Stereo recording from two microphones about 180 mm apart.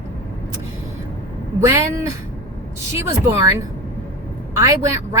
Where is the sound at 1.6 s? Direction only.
15° right (ahead or behind).